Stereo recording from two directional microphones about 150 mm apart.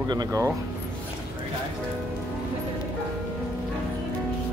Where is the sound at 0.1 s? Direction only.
25° right (ahead or behind).